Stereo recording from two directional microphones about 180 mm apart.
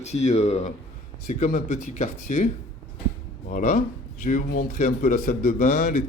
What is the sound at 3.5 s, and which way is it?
Speech, 45° left (ahead or behind).